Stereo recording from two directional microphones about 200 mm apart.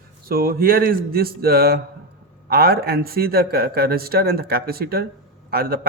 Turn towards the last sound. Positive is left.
turn(degrees=-50)  # may be behind; listen again after turning